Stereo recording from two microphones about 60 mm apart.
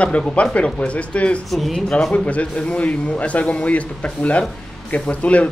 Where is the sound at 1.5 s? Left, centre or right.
Centre; by 5.5 s left.